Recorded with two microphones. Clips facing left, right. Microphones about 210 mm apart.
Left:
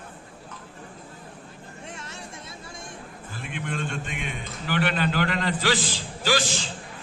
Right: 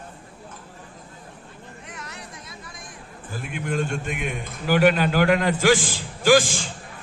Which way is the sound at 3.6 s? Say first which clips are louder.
Right 5 dB; 45° right (ahead or behind).